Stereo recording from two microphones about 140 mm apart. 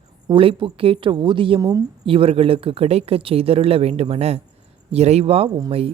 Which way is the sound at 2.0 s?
40° right (ahead or behind).